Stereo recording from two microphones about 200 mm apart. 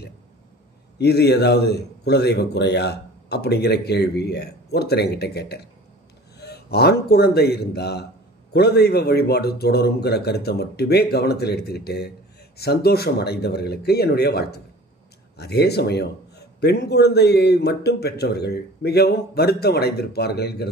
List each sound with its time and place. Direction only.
0.9 s a man's voice: 55° left (ahead or behind)